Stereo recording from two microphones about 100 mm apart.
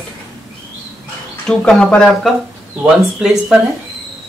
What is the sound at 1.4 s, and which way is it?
Speech, 5° left (ahead or behind).